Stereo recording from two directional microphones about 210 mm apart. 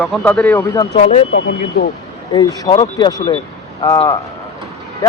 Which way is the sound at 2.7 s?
30° left (ahead or behind).